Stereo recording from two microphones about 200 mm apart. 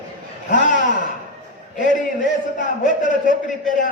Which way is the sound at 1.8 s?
40° left (ahead or behind).